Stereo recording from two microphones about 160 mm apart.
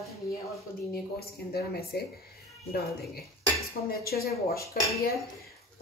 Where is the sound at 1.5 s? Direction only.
80° left.